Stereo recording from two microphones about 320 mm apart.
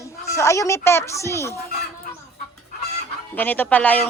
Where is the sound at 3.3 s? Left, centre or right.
Centre.